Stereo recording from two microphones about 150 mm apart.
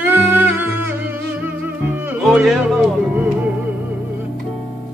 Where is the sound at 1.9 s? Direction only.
10° right (ahead or behind).